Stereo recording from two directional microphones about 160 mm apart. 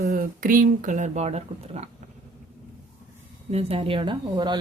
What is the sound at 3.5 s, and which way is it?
Speech, 35° right (ahead or behind).